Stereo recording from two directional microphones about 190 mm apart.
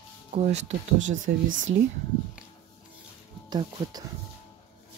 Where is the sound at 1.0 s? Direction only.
90° right.